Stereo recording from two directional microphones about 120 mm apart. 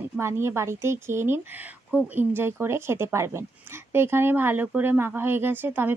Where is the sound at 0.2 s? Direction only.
20° right (ahead or behind).